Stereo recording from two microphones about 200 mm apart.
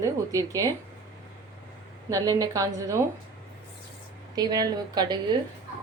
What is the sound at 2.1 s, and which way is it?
Speech, 15° right (ahead or behind).